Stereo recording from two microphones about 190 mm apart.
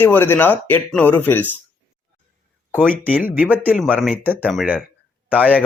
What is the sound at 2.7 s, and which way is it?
Speech, 10° right (ahead or behind).